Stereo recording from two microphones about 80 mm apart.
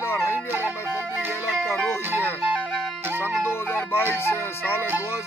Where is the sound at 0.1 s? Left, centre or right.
Left.